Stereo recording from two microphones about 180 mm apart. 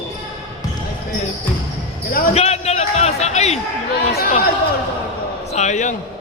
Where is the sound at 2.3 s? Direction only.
35° left (ahead or behind).